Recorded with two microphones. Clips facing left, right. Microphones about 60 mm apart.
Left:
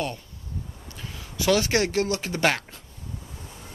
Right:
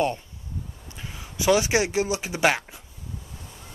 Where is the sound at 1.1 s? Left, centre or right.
Centre.